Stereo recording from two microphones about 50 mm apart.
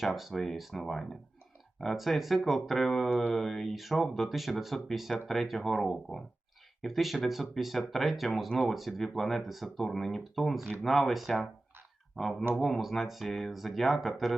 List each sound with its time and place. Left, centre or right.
0.0 s speech: centre